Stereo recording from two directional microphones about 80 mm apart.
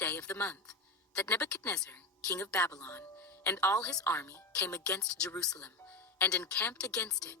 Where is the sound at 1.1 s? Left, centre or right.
Centre.